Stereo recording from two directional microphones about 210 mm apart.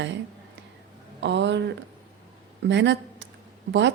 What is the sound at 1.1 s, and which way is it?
Speech, 60° right (ahead or behind).